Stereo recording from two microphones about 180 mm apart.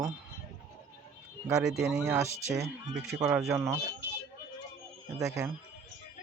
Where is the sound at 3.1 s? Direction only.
5° right (ahead or behind).